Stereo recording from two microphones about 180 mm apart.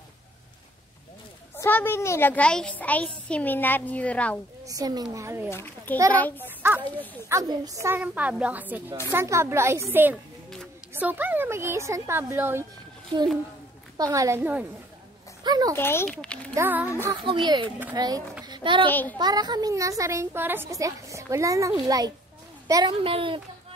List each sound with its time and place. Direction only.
1.6 s a child's voice: 10° left (ahead or behind)
4.6 s a woman's voice: 20° right (ahead or behind)
5.5 s a child's voice: 15° left (ahead or behind)
6.6 s a woman's voice: 10° right (ahead or behind)
13.9 s a woman's voice: 20° right (ahead or behind)
15.4 s speech: 20° right (ahead or behind)
15.7 s a child's voice: 15° left (ahead or behind)
16.5 s a woman's voice: 10° right (ahead or behind)
17.2 s a woman's voice: 30° right (ahead or behind)
18.4 s a sound: 25° right (ahead or behind)
18.9 s a child's voice: 10° left (ahead or behind)
19.1 s a woman's voice: 20° right (ahead or behind)